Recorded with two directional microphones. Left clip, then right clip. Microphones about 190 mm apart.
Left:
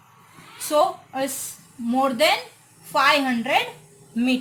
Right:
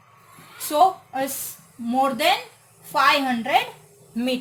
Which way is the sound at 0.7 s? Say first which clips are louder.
Right 2 dB; 25° right (ahead or behind).